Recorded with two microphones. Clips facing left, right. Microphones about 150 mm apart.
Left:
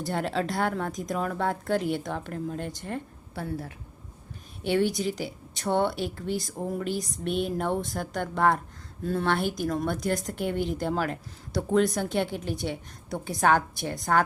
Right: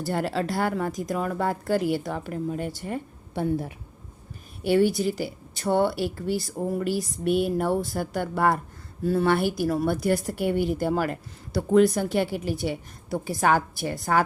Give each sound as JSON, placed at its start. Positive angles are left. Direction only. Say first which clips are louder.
{"t": 0.0, "sound": "speech", "louder": "right 2 dB", "side_deg": 0}
{"t": 3.3, "sound": "speech", "louder": "right 7 dB", "side_deg": -15}
{"t": 4.6, "sound": "speech", "louder": "right 4 dB", "side_deg": -5}